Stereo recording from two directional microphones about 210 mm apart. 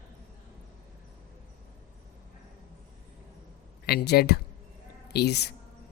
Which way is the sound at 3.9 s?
50° left (ahead or behind).